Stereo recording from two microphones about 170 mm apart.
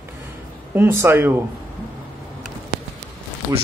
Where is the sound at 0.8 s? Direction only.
15° right (ahead or behind).